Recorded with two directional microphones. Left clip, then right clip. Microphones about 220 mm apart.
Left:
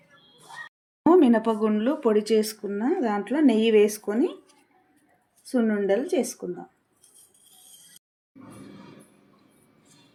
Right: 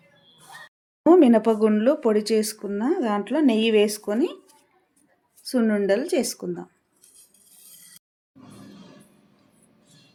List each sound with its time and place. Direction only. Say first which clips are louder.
1.0 s speech: right 3 dB; 25° right (ahead or behind)
5.5 s speech: right 2 dB; 25° right (ahead or behind)